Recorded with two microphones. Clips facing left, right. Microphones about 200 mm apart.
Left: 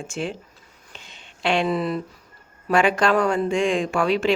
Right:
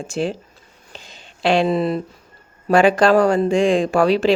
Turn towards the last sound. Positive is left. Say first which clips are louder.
# right 5 dB
turn(degrees=-35)  # may be behind; listen again after turning